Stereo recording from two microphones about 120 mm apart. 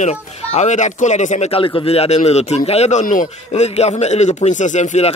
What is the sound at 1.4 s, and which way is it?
A man's voice, 50° left (ahead or behind).